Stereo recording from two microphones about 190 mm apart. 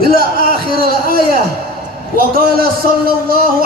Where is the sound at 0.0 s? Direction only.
50° right (ahead or behind).